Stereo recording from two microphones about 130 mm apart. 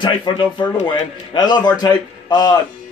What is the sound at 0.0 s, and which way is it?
A man's voice, 35° left (ahead or behind).